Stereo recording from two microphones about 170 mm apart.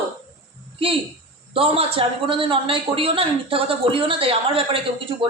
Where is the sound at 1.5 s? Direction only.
35° right (ahead or behind).